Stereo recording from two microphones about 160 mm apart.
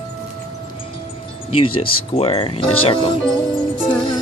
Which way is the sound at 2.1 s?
35° left (ahead or behind).